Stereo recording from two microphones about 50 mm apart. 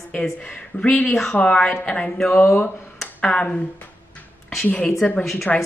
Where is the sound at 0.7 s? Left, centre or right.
Centre.